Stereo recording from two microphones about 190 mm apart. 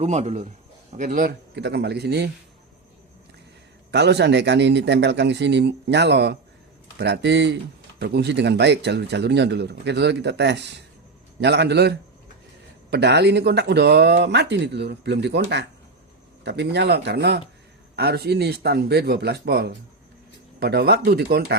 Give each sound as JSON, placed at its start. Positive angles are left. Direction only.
{"t": 0.0, "sound": "a man's voice", "side_deg": -35}
{"t": 3.9, "sound": "speech", "side_deg": -60}